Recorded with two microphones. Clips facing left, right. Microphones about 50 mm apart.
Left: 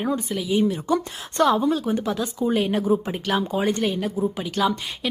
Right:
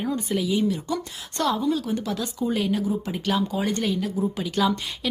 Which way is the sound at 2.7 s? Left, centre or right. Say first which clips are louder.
Left 4 dB; left.